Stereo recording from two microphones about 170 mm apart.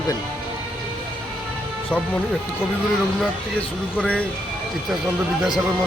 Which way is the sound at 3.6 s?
5° left (ahead or behind).